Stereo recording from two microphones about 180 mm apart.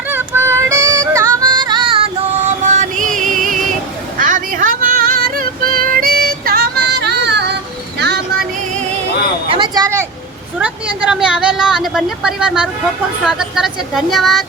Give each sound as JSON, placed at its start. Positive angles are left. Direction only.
{"t": 0.1, "sound": "music", "side_deg": -15}
{"t": 2.7, "sound": "music", "side_deg": -45}
{"t": 4.2, "sound": "female singing", "side_deg": -45}
{"t": 9.5, "sound": "a sound", "side_deg": -25}
{"t": 10.6, "sound": "a sound", "side_deg": -5}
{"t": 13.2, "sound": "speech", "side_deg": -5}